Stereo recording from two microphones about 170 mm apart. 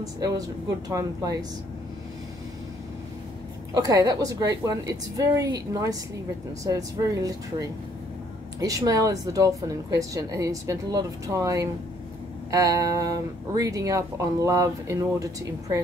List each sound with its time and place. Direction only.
0.8 s speech: 20° right (ahead or behind)
3.7 s speech: 20° right (ahead or behind)